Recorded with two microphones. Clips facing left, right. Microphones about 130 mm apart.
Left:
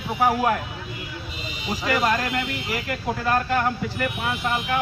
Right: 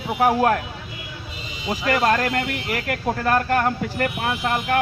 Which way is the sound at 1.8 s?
45° right (ahead or behind).